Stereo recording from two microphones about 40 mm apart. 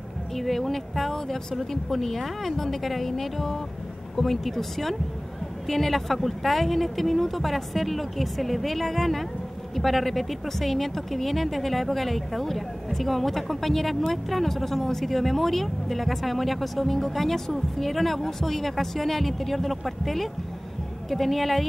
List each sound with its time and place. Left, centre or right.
0.4 s speech: centre